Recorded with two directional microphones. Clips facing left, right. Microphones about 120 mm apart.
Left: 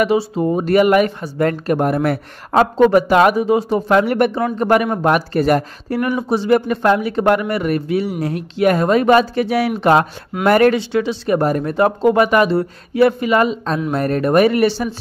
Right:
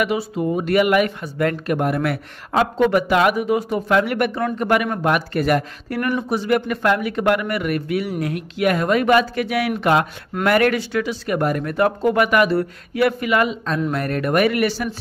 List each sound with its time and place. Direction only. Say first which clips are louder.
0.0 s a man's voice: left 5 dB; 30° left (ahead or behind)